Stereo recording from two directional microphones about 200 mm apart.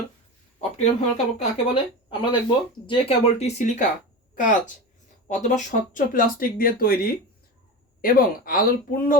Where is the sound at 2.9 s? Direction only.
30° left (ahead or behind).